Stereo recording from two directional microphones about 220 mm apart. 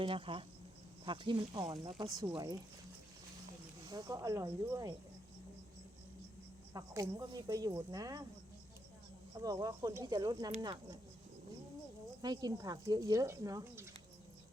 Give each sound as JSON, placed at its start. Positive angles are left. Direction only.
{"t": 0.0, "sound": "speech", "side_deg": -25}
{"t": 3.8, "sound": "speech", "side_deg": -15}
{"t": 6.7, "sound": "speech", "side_deg": -15}
{"t": 9.4, "sound": "speech", "side_deg": -15}
{"t": 12.2, "sound": "speech", "side_deg": -20}